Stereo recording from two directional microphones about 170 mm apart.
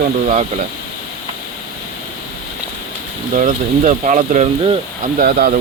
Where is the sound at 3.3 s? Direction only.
50° right (ahead or behind).